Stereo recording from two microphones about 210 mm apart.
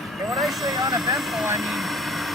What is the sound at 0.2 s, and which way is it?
Vehicle, centre (ahead or behind).